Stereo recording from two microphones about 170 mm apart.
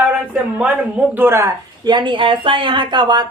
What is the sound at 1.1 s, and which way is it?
Speech, 10° right (ahead or behind).